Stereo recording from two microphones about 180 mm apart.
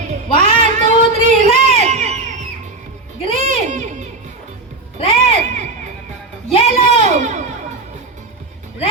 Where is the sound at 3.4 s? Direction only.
40° right (ahead or behind).